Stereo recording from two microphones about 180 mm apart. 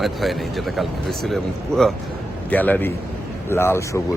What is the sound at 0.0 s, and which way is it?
Speech, centre (ahead or behind).